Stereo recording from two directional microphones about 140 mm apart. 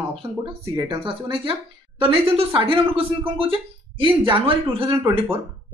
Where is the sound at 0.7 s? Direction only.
35° right (ahead or behind).